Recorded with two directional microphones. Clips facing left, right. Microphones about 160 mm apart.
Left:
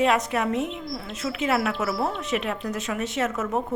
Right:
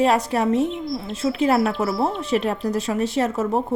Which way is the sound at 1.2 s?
30° right (ahead or behind).